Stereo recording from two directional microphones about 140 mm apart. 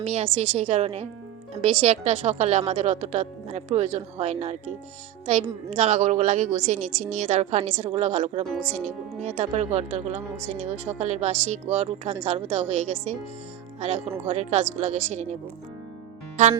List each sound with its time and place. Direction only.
0.0 s a woman's voice: 50° right (ahead or behind)
5.7 s a woman's voice: 50° right (ahead or behind)